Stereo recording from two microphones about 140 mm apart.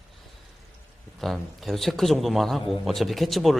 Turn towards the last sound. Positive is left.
turn(degrees=0)  # may be behind; listen again after turning